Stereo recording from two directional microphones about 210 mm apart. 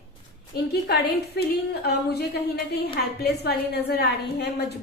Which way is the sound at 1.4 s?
50° left (ahead or behind).